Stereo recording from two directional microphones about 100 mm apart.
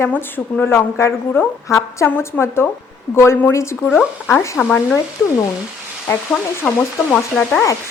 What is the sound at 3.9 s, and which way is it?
Speech, centre (ahead or behind).